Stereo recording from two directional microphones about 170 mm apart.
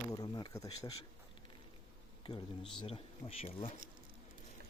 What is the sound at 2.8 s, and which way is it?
Speech, 35° left (ahead or behind).